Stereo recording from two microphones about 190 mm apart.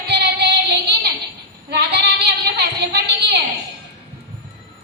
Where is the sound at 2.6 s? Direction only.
60° right (ahead or behind).